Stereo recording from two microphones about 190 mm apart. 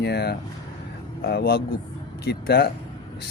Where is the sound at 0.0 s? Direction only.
60° left (ahead or behind).